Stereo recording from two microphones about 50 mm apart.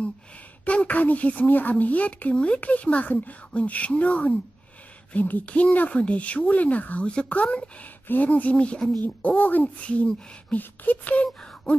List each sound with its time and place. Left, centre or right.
0.7 s a woman's voice: left
9.4 s beatboxing: left
9.8 s a woman's voice: left
10.6 s beatboxing: left